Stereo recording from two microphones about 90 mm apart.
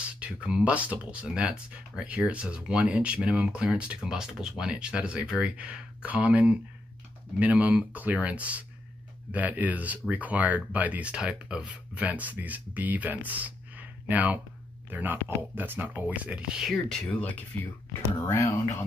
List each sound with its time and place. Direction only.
0.0 s speech: 15° right (ahead or behind)
17.1 s speech: 15° left (ahead or behind)
18.2 s speech: 30° left (ahead or behind)